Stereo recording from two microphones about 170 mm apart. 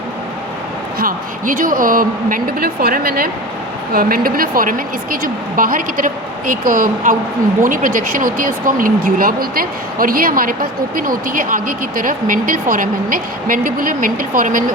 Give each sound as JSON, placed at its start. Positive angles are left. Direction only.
{"t": 0.9, "sound": "speech", "side_deg": -55}